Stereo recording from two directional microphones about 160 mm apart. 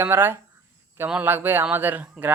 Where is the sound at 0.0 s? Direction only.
15° right (ahead or behind).